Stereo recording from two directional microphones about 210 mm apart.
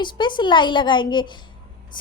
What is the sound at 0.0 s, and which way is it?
A woman's voice, 20° left (ahead or behind).